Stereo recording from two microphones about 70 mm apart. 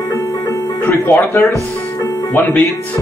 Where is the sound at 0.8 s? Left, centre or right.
Left.